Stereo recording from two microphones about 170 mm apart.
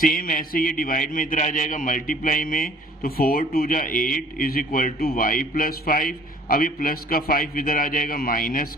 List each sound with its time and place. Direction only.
0.0 s a man's voice: 55° left (ahead or behind)